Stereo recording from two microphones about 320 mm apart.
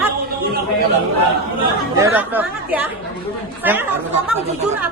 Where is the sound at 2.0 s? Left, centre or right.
Centre.